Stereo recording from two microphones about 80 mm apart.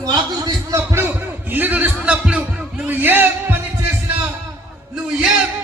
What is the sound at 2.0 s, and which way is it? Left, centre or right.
Music, centre.